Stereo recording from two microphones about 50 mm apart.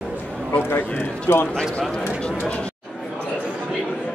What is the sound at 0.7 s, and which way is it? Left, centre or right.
Speech, left.